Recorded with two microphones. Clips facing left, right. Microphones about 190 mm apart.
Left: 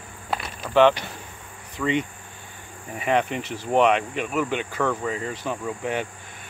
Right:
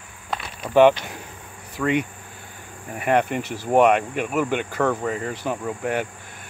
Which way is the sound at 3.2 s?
50° right (ahead or behind).